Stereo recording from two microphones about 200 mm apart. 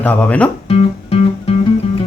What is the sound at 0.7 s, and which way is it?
Music, 30° left (ahead or behind).